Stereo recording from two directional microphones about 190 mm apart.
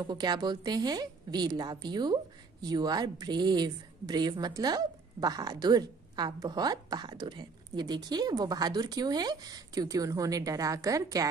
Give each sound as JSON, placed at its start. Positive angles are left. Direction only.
{"t": 0.0, "sound": "a woman's voice", "side_deg": -20}